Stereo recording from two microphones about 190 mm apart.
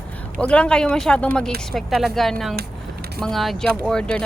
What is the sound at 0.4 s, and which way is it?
Speech, 5° left (ahead or behind).